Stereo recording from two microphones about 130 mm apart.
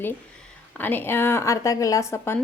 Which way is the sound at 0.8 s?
15° left (ahead or behind).